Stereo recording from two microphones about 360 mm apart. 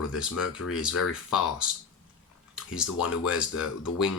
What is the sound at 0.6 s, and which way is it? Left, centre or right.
Speech, left.